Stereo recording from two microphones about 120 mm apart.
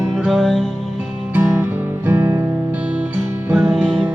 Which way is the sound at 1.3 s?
15° right (ahead or behind).